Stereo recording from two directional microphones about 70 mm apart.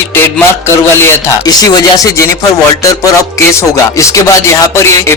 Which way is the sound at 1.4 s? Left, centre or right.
Left.